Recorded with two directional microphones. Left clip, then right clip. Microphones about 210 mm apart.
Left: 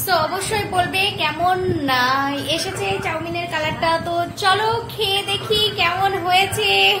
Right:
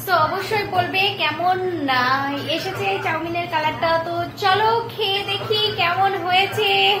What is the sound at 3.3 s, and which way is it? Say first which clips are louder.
Child singing: right 1 dB; 20° left (ahead or behind).